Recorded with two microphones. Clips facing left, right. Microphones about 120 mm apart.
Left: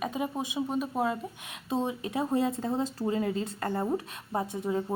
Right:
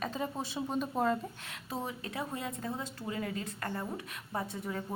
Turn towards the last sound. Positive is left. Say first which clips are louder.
# left 8 dB
turn(degrees=20)  # may be behind; listen again after turning